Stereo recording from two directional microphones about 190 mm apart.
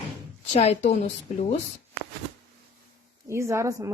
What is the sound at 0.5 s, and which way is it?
A woman's voice, 35° left (ahead or behind).